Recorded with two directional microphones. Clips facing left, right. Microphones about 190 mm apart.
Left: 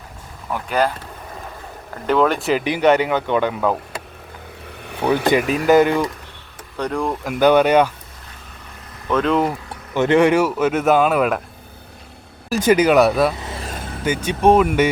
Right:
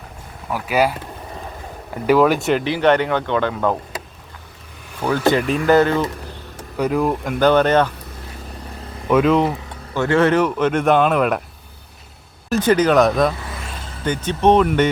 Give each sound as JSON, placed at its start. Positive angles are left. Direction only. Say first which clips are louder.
{"t": 0.5, "sound": "speech", "louder": "right 1 dB", "side_deg": -5}
{"t": 2.6, "sound": "speech", "louder": "left 2 dB", "side_deg": 15}
{"t": 5.0, "sound": "speech", "louder": "left 1 dB", "side_deg": 15}
{"t": 6.7, "sound": "speech", "louder": "right 4 dB", "side_deg": -5}
{"t": 7.3, "sound": "speech", "louder": "left 2 dB", "side_deg": 10}
{"t": 9.0, "sound": "speech", "louder": "right 3 dB", "side_deg": -5}
{"t": 9.9, "sound": "speech", "louder": "left 2 dB", "side_deg": 20}
{"t": 12.5, "sound": "speech", "louder": "left 1 dB", "side_deg": 10}
{"t": 13.4, "sound": "vehicle", "louder": "left 2 dB", "side_deg": 25}
{"t": 14.0, "sound": "speech", "louder": "left 1 dB", "side_deg": 10}